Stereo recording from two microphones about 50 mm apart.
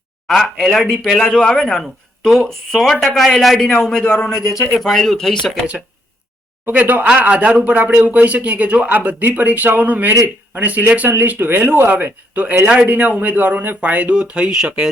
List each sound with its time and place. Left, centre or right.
0.3 s speech: centre
1.3 s a man's voice: centre
4.6 s a man's voice: centre
5.5 s speech: right
6.7 s speech: right
11.9 s speech: right; by 14.8 s centre